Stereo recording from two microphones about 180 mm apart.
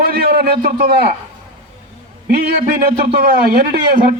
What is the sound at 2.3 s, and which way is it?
Speech, 60° right (ahead or behind).